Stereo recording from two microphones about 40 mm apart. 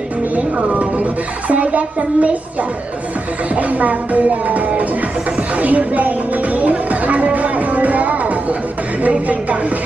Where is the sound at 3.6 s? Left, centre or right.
Right.